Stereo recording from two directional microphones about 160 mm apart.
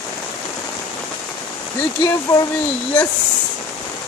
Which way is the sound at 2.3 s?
20° left (ahead or behind).